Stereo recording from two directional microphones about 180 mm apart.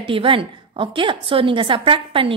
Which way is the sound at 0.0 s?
30° right (ahead or behind).